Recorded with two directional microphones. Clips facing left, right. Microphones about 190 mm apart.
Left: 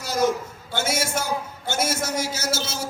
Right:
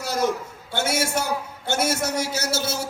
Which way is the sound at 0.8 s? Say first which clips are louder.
Right 1 dB; 65° right (ahead or behind).